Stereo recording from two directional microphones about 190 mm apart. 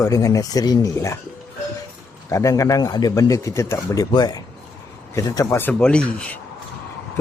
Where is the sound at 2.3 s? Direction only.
15° left (ahead or behind).